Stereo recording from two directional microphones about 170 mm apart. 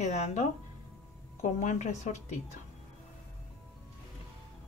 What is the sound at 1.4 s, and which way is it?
Speech, 45° left (ahead or behind).